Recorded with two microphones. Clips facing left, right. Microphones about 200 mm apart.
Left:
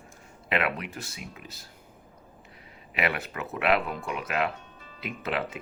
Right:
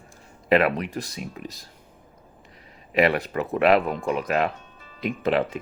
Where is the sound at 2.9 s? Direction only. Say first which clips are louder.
Right 9 dB; 35° right (ahead or behind).